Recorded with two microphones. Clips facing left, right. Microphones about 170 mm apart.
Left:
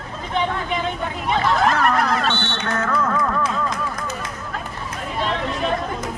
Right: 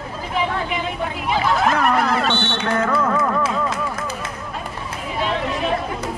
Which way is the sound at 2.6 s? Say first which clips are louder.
Right 2 dB; 30° right (ahead or behind).